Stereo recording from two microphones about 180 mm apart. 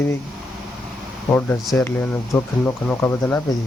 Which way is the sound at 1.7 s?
10° left (ahead or behind).